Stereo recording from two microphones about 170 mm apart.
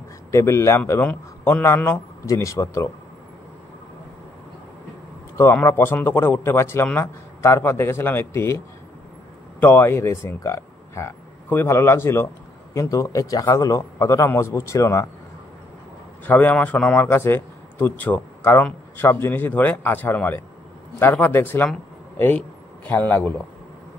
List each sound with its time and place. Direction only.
0.3 s a man's voice: 15° left (ahead or behind)
5.4 s a man's voice: 10° left (ahead or behind)
9.6 s a man's voice: 10° left (ahead or behind)
16.3 s a man's voice: 10° left (ahead or behind)
22.8 s a man's voice: 10° left (ahead or behind)